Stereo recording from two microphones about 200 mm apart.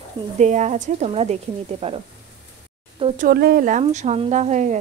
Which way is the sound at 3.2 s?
50° right (ahead or behind).